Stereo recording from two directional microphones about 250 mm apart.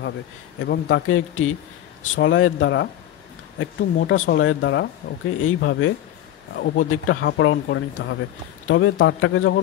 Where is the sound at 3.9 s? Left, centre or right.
Left.